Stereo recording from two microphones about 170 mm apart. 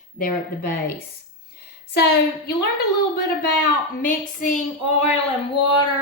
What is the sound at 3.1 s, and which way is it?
Speech, 75° left (ahead or behind).